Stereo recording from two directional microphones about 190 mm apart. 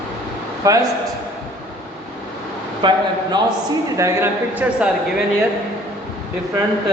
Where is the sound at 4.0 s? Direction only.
15° right (ahead or behind).